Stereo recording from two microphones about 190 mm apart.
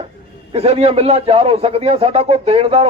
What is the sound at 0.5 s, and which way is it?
Speech, 30° right (ahead or behind).